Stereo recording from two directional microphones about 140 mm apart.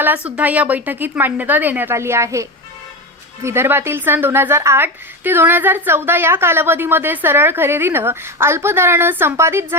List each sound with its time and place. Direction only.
0.0 s a woman's voice: 10° right (ahead or behind)